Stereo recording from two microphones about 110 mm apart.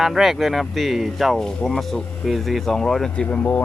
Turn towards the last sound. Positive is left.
turn(degrees=10)  # may be behind; listen again after turning